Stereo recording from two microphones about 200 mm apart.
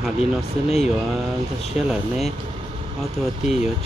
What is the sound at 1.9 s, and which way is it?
Speech, centre (ahead or behind).